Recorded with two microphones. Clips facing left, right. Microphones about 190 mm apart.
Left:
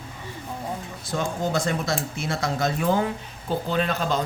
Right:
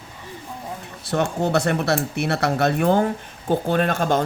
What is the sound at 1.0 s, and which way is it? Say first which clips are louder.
Speech: right 5 dB; 65° right (ahead or behind).